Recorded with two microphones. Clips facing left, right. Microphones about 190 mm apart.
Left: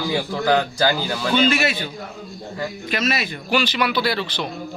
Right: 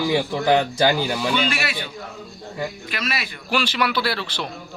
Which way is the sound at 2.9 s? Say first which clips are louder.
Left 6 dB; 25° left (ahead or behind).